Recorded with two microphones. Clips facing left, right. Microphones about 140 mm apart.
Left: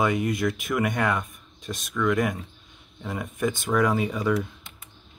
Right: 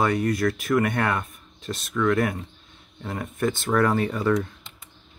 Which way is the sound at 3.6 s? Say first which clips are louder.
Right 1 dB; 10° left (ahead or behind).